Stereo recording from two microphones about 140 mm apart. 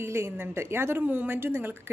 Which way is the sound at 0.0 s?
20° right (ahead or behind).